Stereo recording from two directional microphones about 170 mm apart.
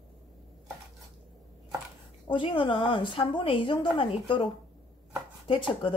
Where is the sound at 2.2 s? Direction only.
30° left (ahead or behind).